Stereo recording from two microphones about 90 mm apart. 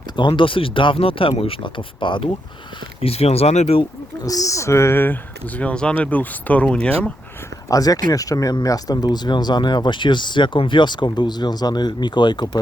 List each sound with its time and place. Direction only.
0.2 s speech: 65° left (ahead or behind)
3.0 s speech: 90° left
4.2 s speech: 40° left (ahead or behind); by 5.1 s 25° left (ahead or behind)
5.5 s speech: 15° left (ahead or behind)
7.7 s speech: 40° left (ahead or behind)